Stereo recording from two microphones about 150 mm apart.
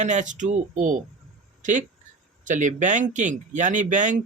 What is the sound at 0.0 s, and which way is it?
Speech, 55° right (ahead or behind).